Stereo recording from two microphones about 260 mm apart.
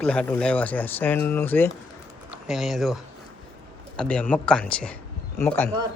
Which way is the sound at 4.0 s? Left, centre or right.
Centre.